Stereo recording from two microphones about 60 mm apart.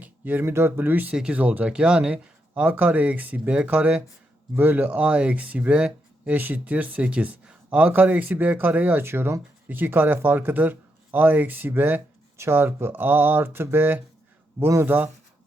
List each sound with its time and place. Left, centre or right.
0.0 s a sound: right
0.5 s speech: right
4.9 s speech: right